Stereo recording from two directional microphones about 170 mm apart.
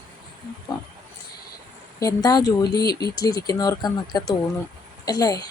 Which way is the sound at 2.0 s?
20° left (ahead or behind).